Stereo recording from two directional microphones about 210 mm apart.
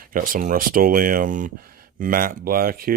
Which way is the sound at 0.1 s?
40° right (ahead or behind).